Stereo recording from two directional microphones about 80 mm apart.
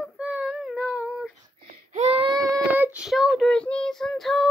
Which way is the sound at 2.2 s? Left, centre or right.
Right.